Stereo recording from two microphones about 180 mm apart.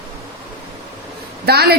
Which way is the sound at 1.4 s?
60° right (ahead or behind).